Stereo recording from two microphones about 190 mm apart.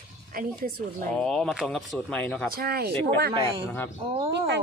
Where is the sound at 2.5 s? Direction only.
50° right (ahead or behind).